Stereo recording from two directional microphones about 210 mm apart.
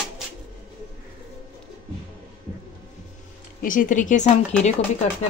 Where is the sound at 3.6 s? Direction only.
40° left (ahead or behind).